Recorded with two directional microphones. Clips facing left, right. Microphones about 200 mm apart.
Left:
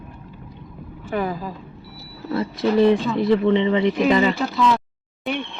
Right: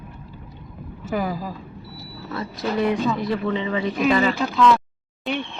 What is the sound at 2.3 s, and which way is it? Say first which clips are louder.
Speech: left 6 dB; 30° left (ahead or behind).